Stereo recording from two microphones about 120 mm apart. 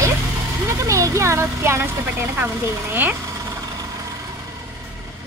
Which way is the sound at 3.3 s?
30° right (ahead or behind).